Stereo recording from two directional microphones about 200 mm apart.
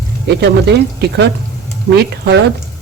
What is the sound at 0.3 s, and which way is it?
Speech, 55° right (ahead or behind).